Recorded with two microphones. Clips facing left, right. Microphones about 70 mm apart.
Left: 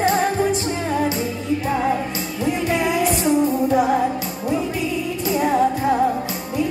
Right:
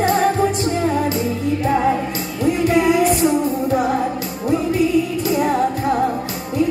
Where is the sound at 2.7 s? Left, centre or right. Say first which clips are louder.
Right 5 dB; right.